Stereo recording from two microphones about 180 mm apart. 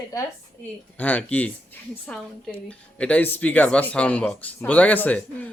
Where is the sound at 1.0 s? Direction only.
10° left (ahead or behind).